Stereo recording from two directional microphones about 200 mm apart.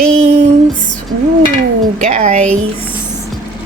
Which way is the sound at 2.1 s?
35° right (ahead or behind).